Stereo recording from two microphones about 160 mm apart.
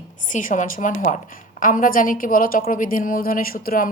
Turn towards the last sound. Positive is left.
turn(degrees=60)  # may be behind; listen again after turning